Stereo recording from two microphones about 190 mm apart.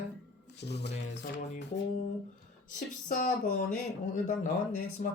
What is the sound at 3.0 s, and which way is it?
Speech, 45° left (ahead or behind).